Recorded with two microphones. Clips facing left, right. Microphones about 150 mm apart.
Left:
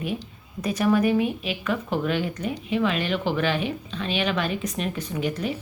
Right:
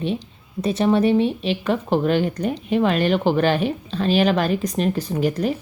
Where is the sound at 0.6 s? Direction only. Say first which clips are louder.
Right 3 dB; 25° right (ahead or behind).